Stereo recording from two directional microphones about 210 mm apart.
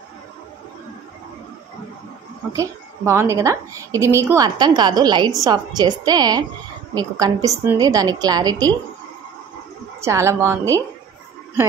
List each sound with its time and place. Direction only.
2.5 s a woman's voice: 15° right (ahead or behind)
10.0 s a woman's voice: 15° right (ahead or behind)